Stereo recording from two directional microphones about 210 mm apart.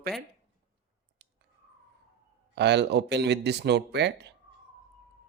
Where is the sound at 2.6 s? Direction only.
55° right (ahead or behind).